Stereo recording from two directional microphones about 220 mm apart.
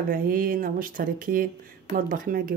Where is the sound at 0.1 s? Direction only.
40° right (ahead or behind).